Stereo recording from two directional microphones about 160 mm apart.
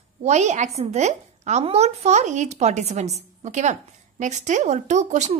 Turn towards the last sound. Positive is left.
turn(degrees=-50)  # may be behind; listen again after turning